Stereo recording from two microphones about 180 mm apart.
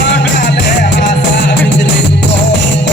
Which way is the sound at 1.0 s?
75° left (ahead or behind).